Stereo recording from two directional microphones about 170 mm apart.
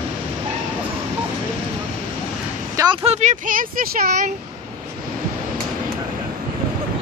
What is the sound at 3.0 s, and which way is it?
Speech, 40° right (ahead or behind).